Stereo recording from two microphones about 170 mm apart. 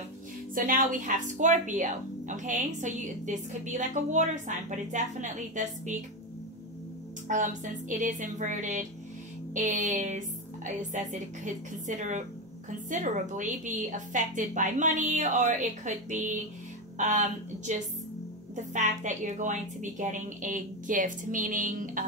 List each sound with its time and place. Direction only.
0.6 s speech: 50° right (ahead or behind)
7.2 s speech: 50° right (ahead or behind)